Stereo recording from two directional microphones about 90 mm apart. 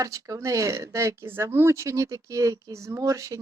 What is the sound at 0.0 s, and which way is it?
Speech, 40° right (ahead or behind).